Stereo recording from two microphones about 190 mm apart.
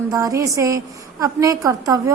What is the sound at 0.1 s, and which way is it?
A woman's voice, 15° right (ahead or behind).